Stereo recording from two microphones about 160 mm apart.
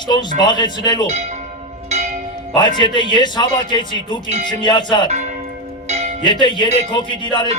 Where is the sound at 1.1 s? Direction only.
45° right (ahead or behind).